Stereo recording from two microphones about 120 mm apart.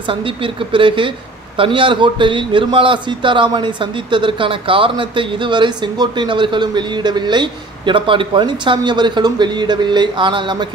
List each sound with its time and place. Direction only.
0.1 s a man's voice: 45° right (ahead or behind)